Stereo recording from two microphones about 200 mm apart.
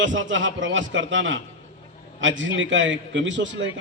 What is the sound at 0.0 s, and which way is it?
A man's voice, 70° right (ahead or behind).